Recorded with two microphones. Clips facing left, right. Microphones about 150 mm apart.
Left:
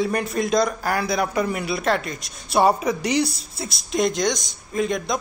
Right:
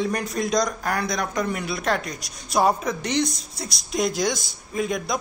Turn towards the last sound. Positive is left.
turn(degrees=0)  # may be behind; listen again after turning